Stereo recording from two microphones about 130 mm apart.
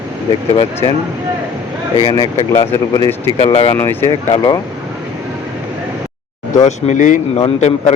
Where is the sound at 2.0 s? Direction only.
35° left (ahead or behind).